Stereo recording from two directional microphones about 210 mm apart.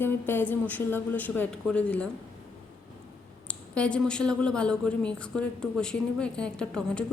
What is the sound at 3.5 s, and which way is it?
Speech, 5° left (ahead or behind).